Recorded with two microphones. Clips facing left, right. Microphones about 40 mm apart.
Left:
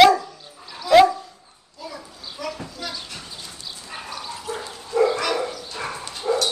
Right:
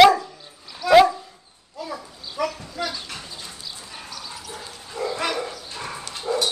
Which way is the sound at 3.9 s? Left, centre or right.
Left.